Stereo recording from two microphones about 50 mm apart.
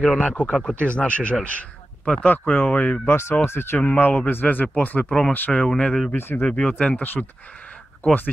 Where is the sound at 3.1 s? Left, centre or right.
Left.